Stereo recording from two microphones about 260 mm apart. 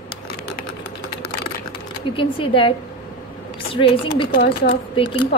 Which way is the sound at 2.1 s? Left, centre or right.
Centre.